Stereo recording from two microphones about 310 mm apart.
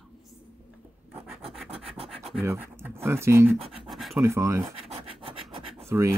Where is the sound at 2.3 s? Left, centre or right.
Centre.